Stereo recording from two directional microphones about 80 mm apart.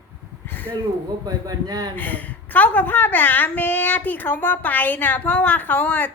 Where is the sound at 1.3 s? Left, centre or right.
Right.